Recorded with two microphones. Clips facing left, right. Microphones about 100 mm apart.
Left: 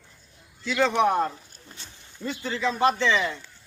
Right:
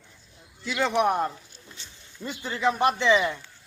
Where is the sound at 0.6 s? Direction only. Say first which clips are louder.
Left 2 dB; 5° right (ahead or behind).